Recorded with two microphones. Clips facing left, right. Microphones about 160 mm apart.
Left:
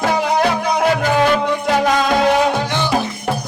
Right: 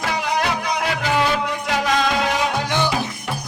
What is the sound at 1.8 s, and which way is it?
Music, 50° left (ahead or behind).